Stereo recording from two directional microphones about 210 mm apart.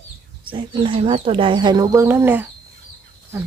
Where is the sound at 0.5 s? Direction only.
25° right (ahead or behind).